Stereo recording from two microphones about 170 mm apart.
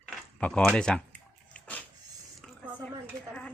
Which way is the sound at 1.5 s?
10° left (ahead or behind).